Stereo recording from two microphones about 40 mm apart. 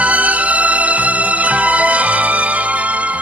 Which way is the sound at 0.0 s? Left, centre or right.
Right.